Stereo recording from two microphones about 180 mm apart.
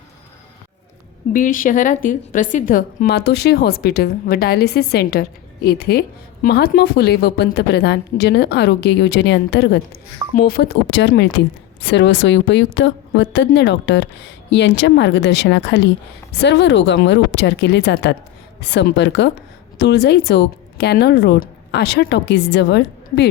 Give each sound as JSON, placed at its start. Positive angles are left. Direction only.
{"t": 1.3, "sound": "a woman's voice", "side_deg": 50}
{"t": 10.3, "sound": "a woman's voice", "side_deg": 60}